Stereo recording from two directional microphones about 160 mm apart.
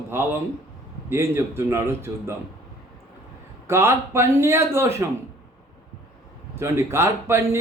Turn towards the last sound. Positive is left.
turn(degrees=-15)  # may be behind; listen again after turning